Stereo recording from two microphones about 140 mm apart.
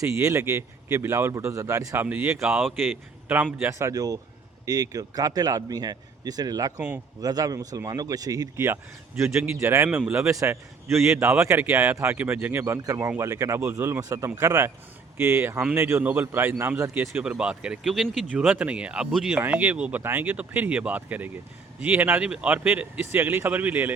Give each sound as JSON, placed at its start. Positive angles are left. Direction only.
{"t": 0.2, "sound": "a man's voice", "side_deg": -20}
{"t": 2.6, "sound": "a man's voice", "side_deg": -5}